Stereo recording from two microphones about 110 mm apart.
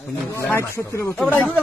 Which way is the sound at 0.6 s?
25° left (ahead or behind).